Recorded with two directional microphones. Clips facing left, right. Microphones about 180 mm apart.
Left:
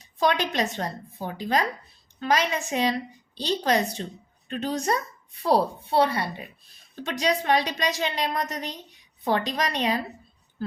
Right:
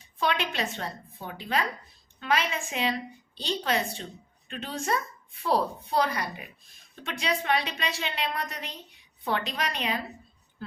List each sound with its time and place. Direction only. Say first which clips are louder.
0.0 s a woman's voice: left 5 dB; 40° left (ahead or behind)